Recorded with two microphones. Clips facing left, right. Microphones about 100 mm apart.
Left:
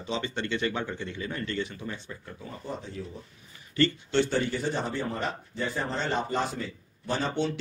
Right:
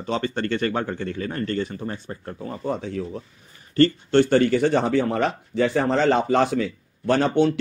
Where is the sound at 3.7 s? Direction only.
50° right (ahead or behind).